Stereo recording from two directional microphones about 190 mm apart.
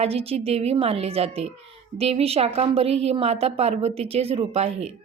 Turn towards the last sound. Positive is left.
turn(degrees=-35)  # may be behind; listen again after turning